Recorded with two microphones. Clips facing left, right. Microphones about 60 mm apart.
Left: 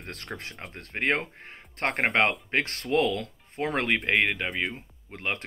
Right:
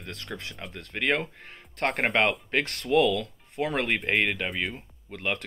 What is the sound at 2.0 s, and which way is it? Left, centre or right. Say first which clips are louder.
Speech: left 1 dB; left.